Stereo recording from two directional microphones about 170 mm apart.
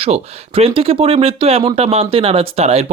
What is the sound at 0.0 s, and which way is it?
Speech, 35° right (ahead or behind).